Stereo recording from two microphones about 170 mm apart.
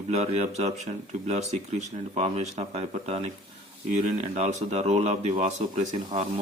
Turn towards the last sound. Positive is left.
turn(degrees=-45)  # may be behind; listen again after turning